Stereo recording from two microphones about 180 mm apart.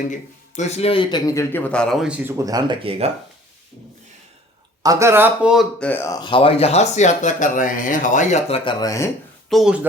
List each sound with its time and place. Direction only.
0.1 s speech: 40° left (ahead or behind); by 2.3 s 5° right (ahead or behind)
2.3 s speech: 20° right (ahead or behind)
4.8 s speech: 20° right (ahead or behind)
5.8 s speech: 10° left (ahead or behind); by 8.7 s 35° left (ahead or behind)
8.8 s speech: 20° left (ahead or behind)
9.5 s speech: centre (ahead or behind)